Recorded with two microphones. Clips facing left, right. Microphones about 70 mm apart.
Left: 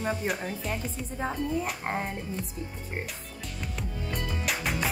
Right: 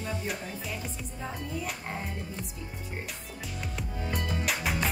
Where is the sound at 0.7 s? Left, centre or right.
Left.